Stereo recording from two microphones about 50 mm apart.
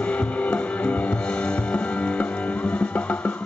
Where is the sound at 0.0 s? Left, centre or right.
Left.